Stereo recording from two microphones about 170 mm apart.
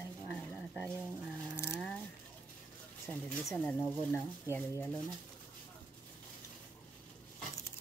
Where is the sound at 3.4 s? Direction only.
5° left (ahead or behind).